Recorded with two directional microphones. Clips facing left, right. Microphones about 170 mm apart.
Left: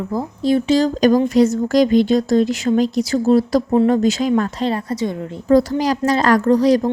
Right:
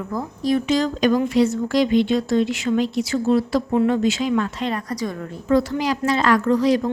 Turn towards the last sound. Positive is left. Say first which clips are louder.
# left 4 dB
turn(degrees=40)  # may be behind; listen again after turning